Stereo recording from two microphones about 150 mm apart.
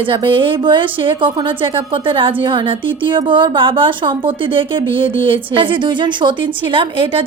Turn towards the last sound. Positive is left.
turn(degrees=-35)  # may be behind; listen again after turning